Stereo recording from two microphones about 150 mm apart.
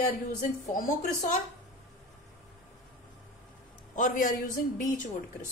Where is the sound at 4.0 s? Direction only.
60° left (ahead or behind).